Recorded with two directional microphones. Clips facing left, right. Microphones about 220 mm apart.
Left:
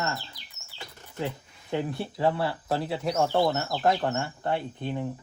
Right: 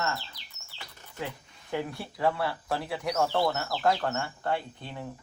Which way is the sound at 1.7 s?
25° left (ahead or behind).